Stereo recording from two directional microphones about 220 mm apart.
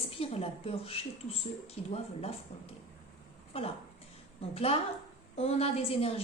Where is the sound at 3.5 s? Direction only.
25° left (ahead or behind).